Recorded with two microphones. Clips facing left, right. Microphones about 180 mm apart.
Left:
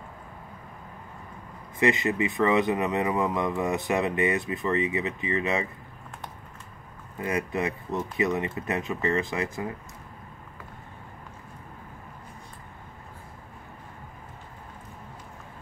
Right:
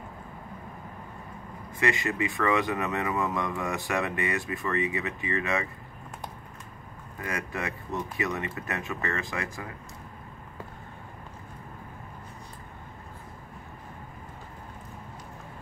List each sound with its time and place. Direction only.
1.8 s speech: 20° left (ahead or behind)
7.2 s speech: 20° left (ahead or behind)